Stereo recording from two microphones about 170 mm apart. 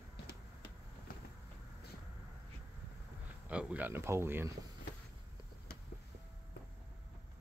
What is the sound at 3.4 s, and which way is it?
Speech, 5° right (ahead or behind).